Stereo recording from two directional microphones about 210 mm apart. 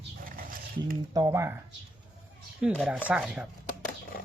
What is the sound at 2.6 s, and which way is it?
Speech, centre (ahead or behind).